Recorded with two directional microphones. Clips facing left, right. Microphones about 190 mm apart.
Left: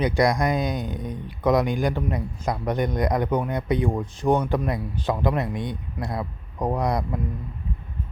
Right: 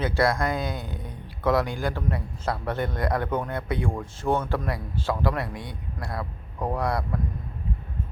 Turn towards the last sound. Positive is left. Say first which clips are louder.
# left 2 dB
turn(degrees=20)  # may be behind; listen again after turning